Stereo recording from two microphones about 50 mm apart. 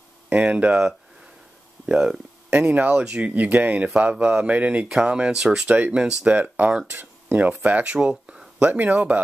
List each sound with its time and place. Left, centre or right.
0.5 s speech: right
1.9 s speech: centre
2.5 s speech: right
4.8 s speech: centre
5.7 s speech: right
6.3 s speech: right
8.5 s speech: right